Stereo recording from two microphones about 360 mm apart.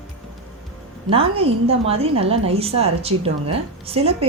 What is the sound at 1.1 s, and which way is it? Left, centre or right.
A woman's voice, centre.